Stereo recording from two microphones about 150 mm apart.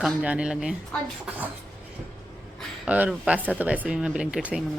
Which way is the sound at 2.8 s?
10° right (ahead or behind).